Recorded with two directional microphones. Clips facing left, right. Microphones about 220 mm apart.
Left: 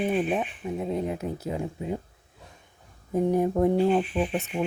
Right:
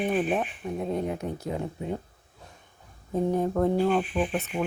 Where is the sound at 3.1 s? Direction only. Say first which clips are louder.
Left 2 dB; 10° left (ahead or behind).